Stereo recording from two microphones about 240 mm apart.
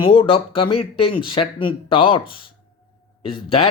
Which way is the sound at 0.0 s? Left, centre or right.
Left.